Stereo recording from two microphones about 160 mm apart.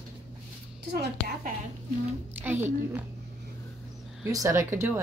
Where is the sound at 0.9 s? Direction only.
70° right (ahead or behind).